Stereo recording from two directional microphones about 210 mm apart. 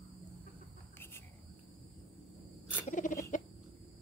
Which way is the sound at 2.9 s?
40° left (ahead or behind).